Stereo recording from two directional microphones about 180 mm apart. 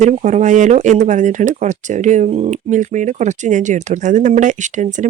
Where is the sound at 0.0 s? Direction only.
40° right (ahead or behind).